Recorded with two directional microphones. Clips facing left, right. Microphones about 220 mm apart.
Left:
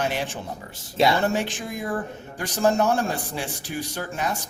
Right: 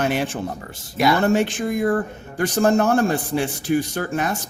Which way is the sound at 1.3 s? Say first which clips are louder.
Right 7 dB; 55° right (ahead or behind).